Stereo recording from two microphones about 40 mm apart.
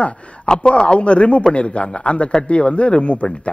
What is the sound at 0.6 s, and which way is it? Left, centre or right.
A man's voice, left.